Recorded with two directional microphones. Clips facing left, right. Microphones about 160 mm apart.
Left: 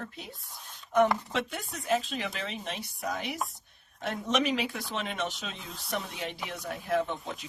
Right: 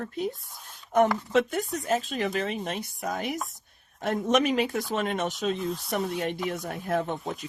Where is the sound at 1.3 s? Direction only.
45° right (ahead or behind).